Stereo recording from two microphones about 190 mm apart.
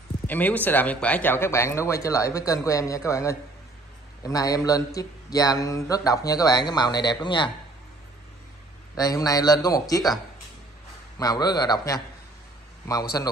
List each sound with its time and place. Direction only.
0.3 s speech: 10° left (ahead or behind); by 7.5 s 25° left (ahead or behind)
8.9 s speech: 20° left (ahead or behind)
11.1 s speech: 20° left (ahead or behind)
13.2 s speech: 15° left (ahead or behind)